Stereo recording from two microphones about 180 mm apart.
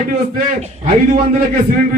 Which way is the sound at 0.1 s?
50° right (ahead or behind).